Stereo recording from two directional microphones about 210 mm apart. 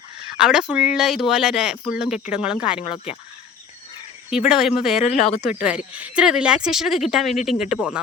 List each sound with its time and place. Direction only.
0.3 s speech: 5° right (ahead or behind)
2.8 s speech: 30° left (ahead or behind)
4.3 s speech: centre (ahead or behind)